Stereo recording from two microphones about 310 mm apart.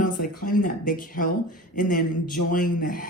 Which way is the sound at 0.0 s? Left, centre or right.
Left.